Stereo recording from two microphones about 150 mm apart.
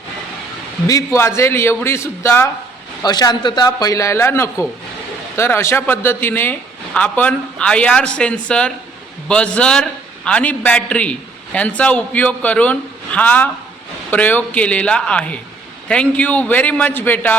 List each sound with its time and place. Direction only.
0.9 s a man's voice: 20° left (ahead or behind)
3.0 s a man's voice: 25° left (ahead or behind)